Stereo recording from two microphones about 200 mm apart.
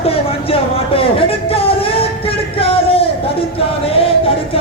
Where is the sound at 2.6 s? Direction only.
30° left (ahead or behind).